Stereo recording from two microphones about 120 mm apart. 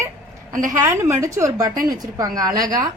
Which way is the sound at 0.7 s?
25° right (ahead or behind).